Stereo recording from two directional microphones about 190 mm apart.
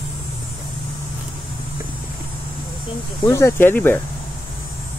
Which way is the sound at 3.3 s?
15° left (ahead or behind).